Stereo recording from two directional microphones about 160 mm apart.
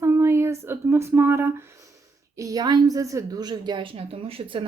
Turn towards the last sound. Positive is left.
turn(degrees=-35)  # may be behind; listen again after turning